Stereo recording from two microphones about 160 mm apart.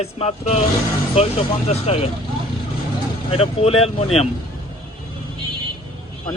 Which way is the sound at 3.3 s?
40° left (ahead or behind).